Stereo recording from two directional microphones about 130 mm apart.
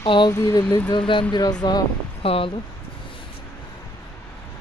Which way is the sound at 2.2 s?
45° left (ahead or behind).